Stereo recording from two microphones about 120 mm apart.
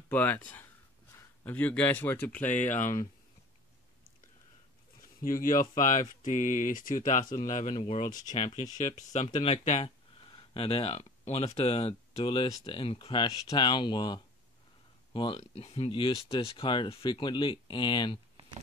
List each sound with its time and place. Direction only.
0.1 s speech: 15° left (ahead or behind)
2.4 s speech: 90° left
5.8 s speech: 90° left
7.7 s speech: 50° left (ahead or behind)
8.3 s speech: 75° left (ahead or behind)
9.3 s speech: 55° left (ahead or behind)
15.5 s speech: 55° left (ahead or behind); by 18.2 s 40° left (ahead or behind)